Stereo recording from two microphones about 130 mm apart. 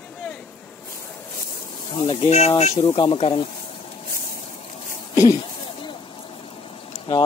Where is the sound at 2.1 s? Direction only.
55° left (ahead or behind); by 3.4 s 40° left (ahead or behind).